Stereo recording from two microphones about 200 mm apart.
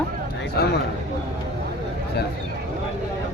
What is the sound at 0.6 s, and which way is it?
Speech, 50° left (ahead or behind).